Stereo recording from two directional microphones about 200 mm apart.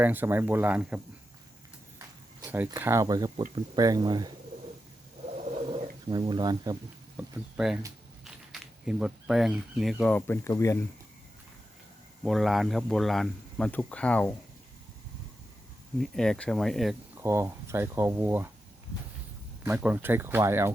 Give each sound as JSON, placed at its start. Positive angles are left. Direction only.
{"t": 0.0, "sound": "speech", "side_deg": -10}
{"t": 5.7, "sound": "speech", "side_deg": -25}
{"t": 7.2, "sound": "a man's voice", "side_deg": -5}
{"t": 12.2, "sound": "a man's voice", "side_deg": 0}
{"t": 16.0, "sound": "a man's voice", "side_deg": 0}
{"t": 17.2, "sound": "speech", "side_deg": -15}
{"t": 19.6, "sound": "speech", "side_deg": -5}